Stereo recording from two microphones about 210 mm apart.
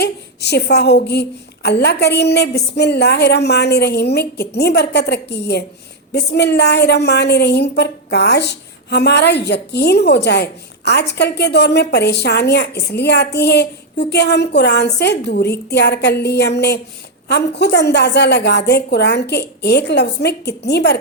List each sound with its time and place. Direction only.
0.0 s a woman's voice: 50° left (ahead or behind)